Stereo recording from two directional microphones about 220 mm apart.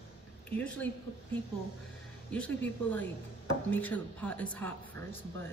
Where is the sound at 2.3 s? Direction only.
5° left (ahead or behind).